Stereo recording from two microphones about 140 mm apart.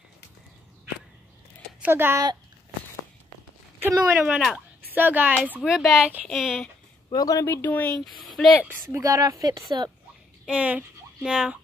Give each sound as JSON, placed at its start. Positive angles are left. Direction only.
{"t": 1.8, "sound": "speech", "side_deg": -15}
{"t": 3.8, "sound": "a woman's voice", "side_deg": -15}
{"t": 5.6, "sound": "speech", "side_deg": 0}
{"t": 7.1, "sound": "speech", "side_deg": 25}
{"t": 8.4, "sound": "a woman's voice", "side_deg": -10}
{"t": 9.0, "sound": "speech", "side_deg": -25}
{"t": 10.4, "sound": "a woman's voice", "side_deg": -10}